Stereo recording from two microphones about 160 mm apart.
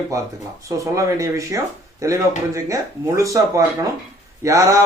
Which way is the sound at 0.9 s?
20° right (ahead or behind).